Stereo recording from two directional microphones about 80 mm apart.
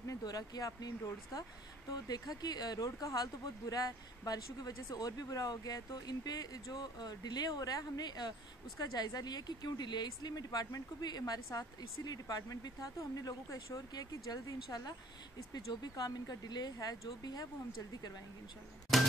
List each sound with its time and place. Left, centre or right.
0.2 s speech: left